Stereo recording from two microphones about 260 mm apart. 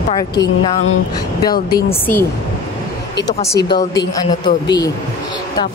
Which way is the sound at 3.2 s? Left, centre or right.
Left.